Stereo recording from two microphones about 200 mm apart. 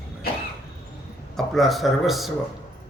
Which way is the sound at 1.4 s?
Centre (ahead or behind).